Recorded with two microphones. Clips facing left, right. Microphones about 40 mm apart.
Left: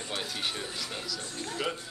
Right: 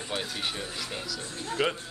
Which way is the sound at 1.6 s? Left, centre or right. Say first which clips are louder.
Right 6 dB; right.